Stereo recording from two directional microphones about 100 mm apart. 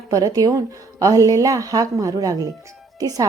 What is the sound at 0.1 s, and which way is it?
A woman's voice, 35° right (ahead or behind).